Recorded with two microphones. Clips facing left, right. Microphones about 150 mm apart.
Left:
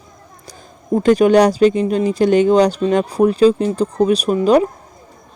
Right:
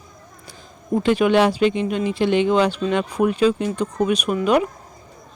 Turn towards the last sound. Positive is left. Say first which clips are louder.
# left 5 dB
turn(degrees=35)  # may be behind; listen again after turning